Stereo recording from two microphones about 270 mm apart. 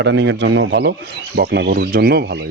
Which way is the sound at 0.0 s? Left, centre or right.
Right.